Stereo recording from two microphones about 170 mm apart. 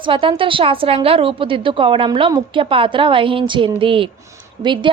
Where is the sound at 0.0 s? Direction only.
30° right (ahead or behind).